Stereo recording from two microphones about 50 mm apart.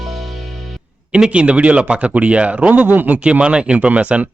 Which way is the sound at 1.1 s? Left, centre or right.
Right.